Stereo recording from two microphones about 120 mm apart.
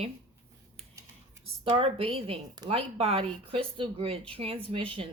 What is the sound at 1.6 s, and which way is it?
Speech, 50° right (ahead or behind).